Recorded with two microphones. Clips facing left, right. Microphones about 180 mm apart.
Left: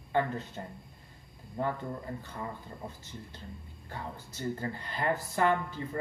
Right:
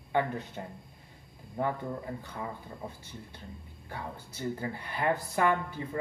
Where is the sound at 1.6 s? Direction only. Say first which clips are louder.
Right 1 dB; 15° right (ahead or behind).